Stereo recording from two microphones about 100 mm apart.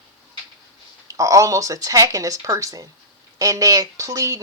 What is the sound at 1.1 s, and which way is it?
Speech, 35° right (ahead or behind).